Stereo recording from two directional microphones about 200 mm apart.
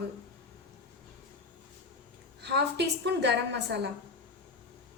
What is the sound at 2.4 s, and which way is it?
A woman's voice, 55° right (ahead or behind).